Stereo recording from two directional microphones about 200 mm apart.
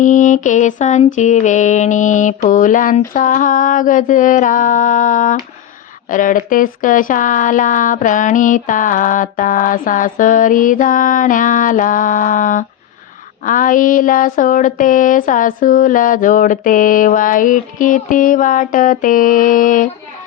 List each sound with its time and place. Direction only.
0.0 s speech: 40° left (ahead or behind)